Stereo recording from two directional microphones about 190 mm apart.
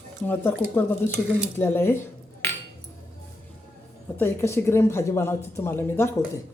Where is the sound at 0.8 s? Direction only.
10° left (ahead or behind).